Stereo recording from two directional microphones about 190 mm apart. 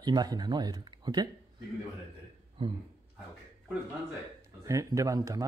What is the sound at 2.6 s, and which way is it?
Speech, 25° right (ahead or behind).